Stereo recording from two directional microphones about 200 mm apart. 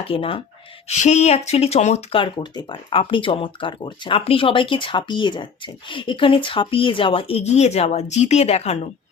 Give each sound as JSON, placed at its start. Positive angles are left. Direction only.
{"t": 0.0, "sound": "speech", "side_deg": 25}